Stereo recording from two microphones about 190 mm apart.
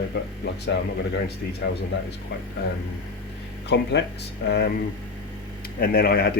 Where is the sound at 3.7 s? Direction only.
65° left (ahead or behind).